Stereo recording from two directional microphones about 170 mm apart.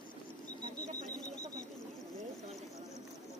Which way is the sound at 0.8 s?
45° left (ahead or behind).